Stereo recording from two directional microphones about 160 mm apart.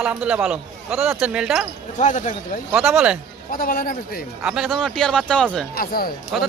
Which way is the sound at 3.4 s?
60° left (ahead or behind).